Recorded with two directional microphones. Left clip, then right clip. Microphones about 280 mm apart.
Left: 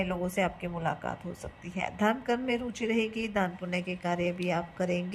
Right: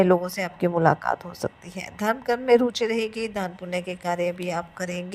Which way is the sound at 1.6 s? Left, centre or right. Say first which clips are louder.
Right 1 dB; centre.